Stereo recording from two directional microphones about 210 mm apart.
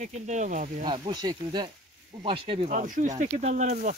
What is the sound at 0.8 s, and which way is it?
Speech, 25° right (ahead or behind).